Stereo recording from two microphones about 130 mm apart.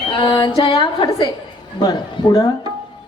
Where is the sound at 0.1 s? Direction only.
40° left (ahead or behind).